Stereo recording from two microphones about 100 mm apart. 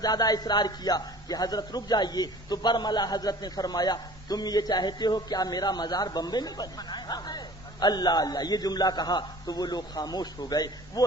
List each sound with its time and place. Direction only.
0.0 s a man's voice: 40° left (ahead or behind)